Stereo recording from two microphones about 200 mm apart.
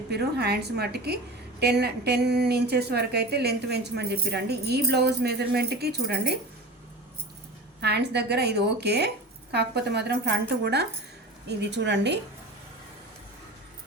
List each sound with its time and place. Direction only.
0.1 s a woman's voice: 55° right (ahead or behind)
7.8 s speech: 55° right (ahead or behind)